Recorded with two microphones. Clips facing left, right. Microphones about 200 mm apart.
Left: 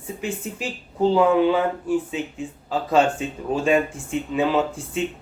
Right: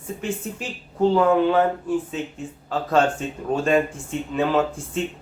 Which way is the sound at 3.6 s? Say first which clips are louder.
Left 1 dB; 5° left (ahead or behind).